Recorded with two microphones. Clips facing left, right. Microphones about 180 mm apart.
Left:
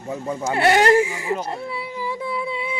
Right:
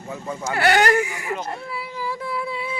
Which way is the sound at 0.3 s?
25° left (ahead or behind).